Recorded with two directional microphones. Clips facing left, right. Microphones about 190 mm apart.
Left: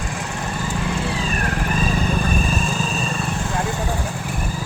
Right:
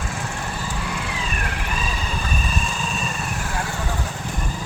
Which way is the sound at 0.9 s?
35° left (ahead or behind).